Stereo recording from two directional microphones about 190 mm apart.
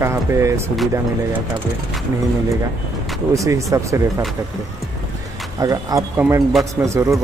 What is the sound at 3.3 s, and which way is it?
Speech, 15° right (ahead or behind).